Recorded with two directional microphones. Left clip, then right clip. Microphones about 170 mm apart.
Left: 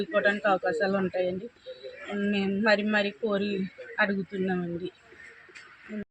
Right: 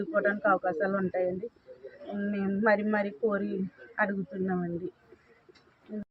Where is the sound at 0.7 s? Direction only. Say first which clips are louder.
Left 2 dB; 30° left (ahead or behind).